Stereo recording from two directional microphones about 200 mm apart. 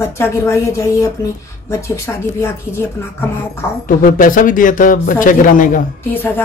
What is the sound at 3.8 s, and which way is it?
Speech, 45° left (ahead or behind).